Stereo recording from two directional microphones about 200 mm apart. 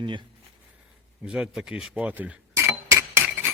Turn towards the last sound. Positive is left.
turn(degrees=-10)  # may be behind; listen again after turning